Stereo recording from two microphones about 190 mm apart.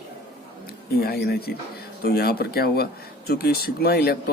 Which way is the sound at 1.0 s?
55° left (ahead or behind).